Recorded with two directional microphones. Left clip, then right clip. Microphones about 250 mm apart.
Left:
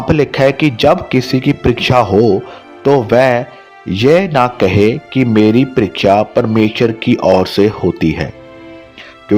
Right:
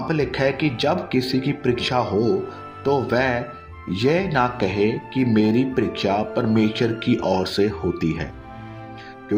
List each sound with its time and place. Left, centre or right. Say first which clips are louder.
0.1 s speech: left 11 dB; left